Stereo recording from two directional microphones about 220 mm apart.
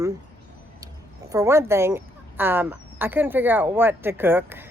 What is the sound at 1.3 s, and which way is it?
Speech, 15° right (ahead or behind).